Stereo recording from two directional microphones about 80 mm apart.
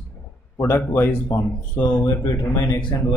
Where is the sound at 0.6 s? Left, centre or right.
Left.